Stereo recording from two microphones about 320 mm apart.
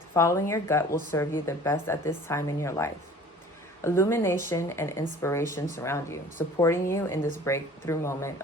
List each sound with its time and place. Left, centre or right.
0.1 s speech: centre